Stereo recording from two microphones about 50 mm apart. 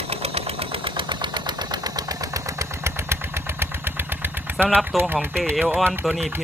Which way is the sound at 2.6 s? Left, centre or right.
Right.